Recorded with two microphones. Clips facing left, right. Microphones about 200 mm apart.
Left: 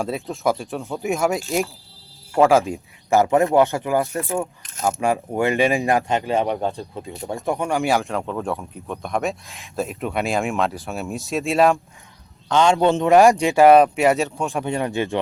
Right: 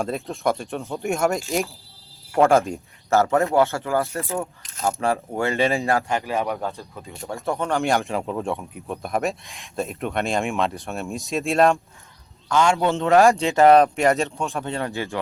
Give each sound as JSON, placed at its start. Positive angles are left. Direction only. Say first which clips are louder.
{"t": 0.0, "sound": "speech", "louder": "left 1 dB", "side_deg": 0}
{"t": 2.4, "sound": "speech", "louder": "left 1 dB", "side_deg": 5}
{"t": 7.8, "sound": "speech", "louder": "left 1 dB", "side_deg": 0}
{"t": 12.5, "sound": "a man's voice", "louder": "left 3 dB", "side_deg": 20}